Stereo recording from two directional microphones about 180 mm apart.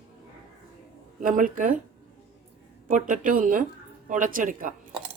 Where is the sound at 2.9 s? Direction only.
45° right (ahead or behind).